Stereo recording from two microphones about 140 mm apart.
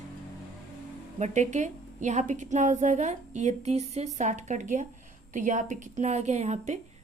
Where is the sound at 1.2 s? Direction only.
60° right (ahead or behind).